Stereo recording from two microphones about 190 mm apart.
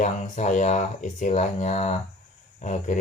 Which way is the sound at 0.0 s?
40° left (ahead or behind).